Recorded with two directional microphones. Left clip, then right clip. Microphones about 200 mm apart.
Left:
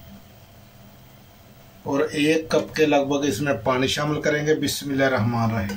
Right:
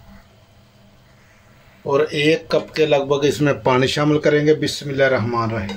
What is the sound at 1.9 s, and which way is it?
Speech, 30° right (ahead or behind).